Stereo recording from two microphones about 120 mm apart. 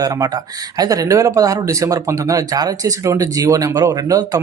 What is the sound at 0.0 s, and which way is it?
Speech, 30° right (ahead or behind).